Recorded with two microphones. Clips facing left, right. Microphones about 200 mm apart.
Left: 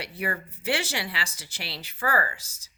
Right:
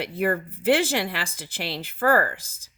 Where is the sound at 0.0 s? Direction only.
50° right (ahead or behind).